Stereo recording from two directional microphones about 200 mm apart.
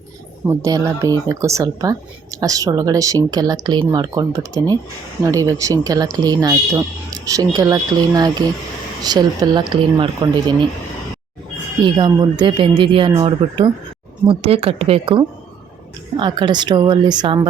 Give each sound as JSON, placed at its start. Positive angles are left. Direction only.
{"t": 0.4, "sound": "speech", "side_deg": -15}
{"t": 11.8, "sound": "speech", "side_deg": -25}